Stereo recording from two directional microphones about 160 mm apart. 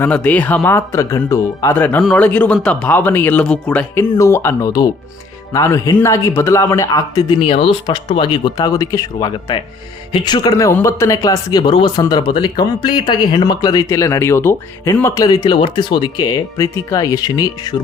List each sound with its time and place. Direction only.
0.0 s speech: 10° left (ahead or behind)
1.7 s speech: 10° left (ahead or behind)
7.4 s speech: 35° left (ahead or behind)